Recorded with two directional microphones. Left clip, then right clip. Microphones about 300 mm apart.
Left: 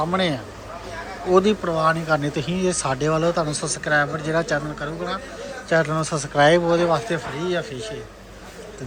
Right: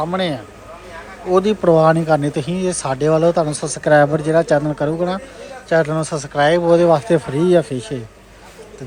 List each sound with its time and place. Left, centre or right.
0.0 s speech: centre